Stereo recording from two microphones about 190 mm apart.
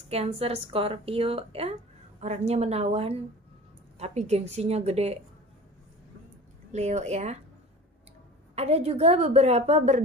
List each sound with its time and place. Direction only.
0.1 s speech: 30° right (ahead or behind)
6.7 s speech: 35° right (ahead or behind)
8.5 s speech: 35° right (ahead or behind)